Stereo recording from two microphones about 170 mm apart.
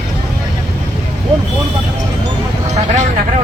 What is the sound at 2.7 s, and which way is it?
Vehicle, 45° right (ahead or behind).